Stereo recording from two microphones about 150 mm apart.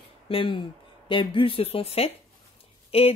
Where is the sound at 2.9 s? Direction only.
40° left (ahead or behind).